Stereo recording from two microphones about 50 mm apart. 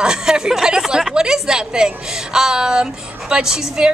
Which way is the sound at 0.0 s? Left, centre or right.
Centre.